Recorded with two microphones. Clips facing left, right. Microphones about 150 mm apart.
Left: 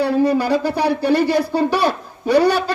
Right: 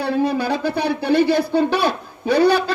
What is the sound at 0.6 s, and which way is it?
A man's voice, 60° right (ahead or behind).